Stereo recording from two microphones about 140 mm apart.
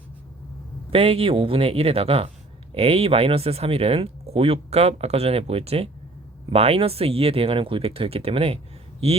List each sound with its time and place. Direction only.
0.9 s speech: 45° right (ahead or behind)